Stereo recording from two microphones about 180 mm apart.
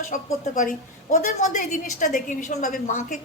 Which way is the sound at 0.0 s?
45° left (ahead or behind).